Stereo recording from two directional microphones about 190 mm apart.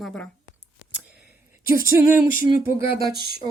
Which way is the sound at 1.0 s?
5° right (ahead or behind).